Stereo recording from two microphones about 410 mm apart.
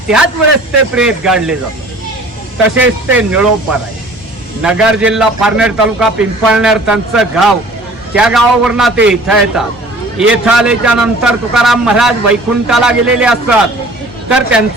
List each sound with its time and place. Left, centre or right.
0.9 s a man's voice: centre
2.7 s speech: right
3.2 s a man's voice: centre